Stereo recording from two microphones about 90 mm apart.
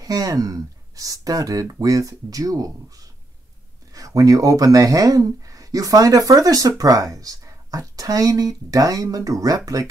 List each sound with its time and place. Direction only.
0.0 s speech: 40° right (ahead or behind)
3.9 s speech: 40° right (ahead or behind)